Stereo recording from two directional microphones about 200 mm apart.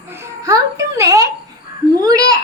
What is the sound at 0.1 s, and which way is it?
Babbling, 15° right (ahead or behind).